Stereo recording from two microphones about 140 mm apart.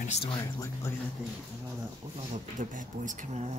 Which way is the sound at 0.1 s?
40° left (ahead or behind).